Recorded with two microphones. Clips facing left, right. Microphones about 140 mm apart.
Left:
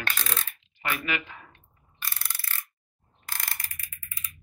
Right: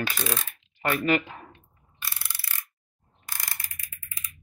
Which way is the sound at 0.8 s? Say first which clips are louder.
Right 7 dB; 40° right (ahead or behind).